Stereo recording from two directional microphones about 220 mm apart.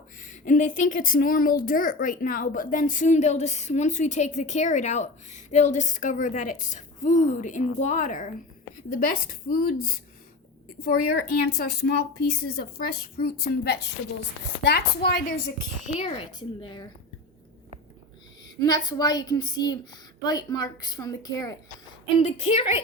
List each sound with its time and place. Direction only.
0.2 s speech: 35° left (ahead or behind)
11.4 s a woman's voice: 45° left (ahead or behind)
15.9 s speech: 30° left (ahead or behind)
18.6 s a woman's voice: 20° left (ahead or behind)
22.2 s speech: 30° left (ahead or behind)